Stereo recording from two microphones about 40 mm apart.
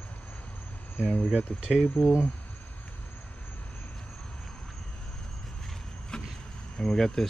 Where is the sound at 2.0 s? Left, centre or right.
Left.